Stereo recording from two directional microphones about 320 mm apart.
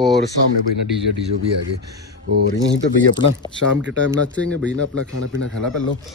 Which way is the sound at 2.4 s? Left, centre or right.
Right.